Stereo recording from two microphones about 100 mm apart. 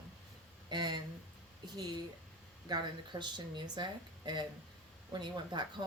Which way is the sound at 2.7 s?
50° right (ahead or behind).